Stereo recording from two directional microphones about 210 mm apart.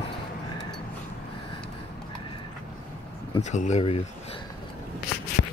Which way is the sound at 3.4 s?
35° left (ahead or behind).